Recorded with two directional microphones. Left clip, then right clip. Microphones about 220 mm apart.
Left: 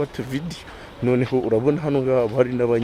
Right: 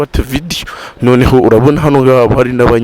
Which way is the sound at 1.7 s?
45° right (ahead or behind).